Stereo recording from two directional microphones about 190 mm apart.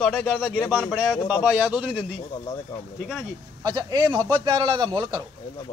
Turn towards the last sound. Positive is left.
turn(degrees=-20)  # may be behind; listen again after turning